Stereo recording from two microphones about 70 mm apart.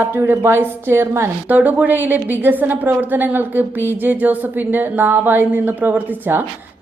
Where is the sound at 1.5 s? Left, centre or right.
Right.